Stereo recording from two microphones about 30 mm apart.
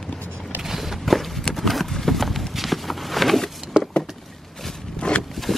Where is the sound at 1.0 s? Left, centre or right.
Centre.